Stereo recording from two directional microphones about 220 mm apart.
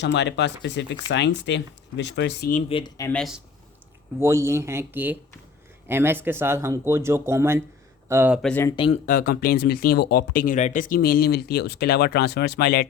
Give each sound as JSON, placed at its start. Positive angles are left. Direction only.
{"t": 0.0, "sound": "speech", "side_deg": 50}
{"t": 2.5, "sound": "speech", "side_deg": 30}
{"t": 3.1, "sound": "speech", "side_deg": 0}
{"t": 4.2, "sound": "speech", "side_deg": -10}
{"t": 8.7, "sound": "speech", "side_deg": 25}
{"t": 9.0, "sound": "speech", "side_deg": 40}